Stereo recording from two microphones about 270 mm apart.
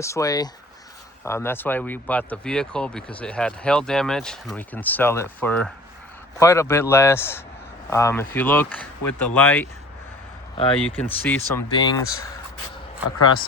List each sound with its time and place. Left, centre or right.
0.0 s speech: centre
10.6 s speech: centre
10.8 s speech: centre